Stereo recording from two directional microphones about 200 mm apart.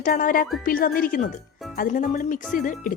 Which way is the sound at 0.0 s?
40° left (ahead or behind).